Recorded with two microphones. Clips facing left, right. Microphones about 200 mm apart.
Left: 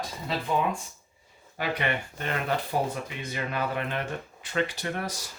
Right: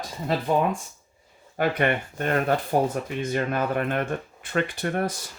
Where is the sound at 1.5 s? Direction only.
50° right (ahead or behind).